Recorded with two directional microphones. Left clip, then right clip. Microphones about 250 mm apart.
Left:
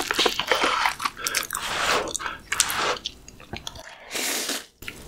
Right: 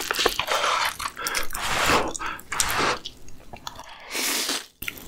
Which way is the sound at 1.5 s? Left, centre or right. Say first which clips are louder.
Right 3 dB; right.